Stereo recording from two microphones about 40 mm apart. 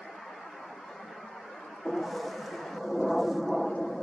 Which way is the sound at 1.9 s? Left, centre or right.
Centre.